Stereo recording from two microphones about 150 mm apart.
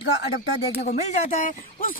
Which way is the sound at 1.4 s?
65° left (ahead or behind).